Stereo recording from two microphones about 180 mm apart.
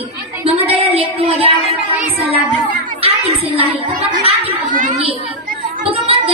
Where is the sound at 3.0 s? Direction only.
35° right (ahead or behind).